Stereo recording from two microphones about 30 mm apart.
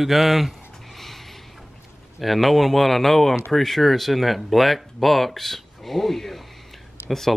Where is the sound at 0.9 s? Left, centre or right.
Centre.